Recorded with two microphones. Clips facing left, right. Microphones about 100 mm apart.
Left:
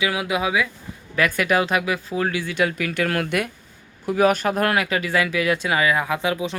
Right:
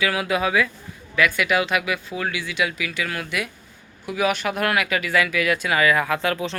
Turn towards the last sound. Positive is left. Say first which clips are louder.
# even
turn(degrees=15)  # may be behind; listen again after turning